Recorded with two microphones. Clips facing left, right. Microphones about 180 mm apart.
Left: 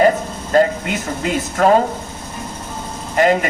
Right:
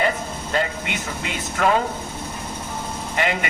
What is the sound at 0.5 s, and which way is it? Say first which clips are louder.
Speech: left 10 dB; 40° left (ahead or behind).